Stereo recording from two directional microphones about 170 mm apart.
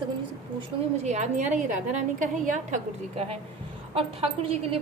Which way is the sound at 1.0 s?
45° right (ahead or behind).